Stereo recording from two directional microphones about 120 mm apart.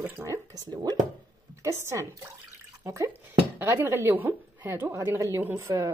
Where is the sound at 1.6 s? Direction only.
25° right (ahead or behind).